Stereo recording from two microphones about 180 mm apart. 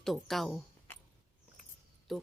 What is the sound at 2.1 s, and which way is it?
Speech, centre (ahead or behind).